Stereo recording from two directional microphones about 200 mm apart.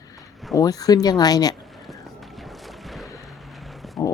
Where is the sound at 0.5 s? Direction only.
20° left (ahead or behind).